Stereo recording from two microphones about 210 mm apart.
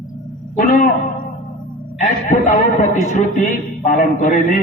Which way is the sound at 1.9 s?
35° left (ahead or behind).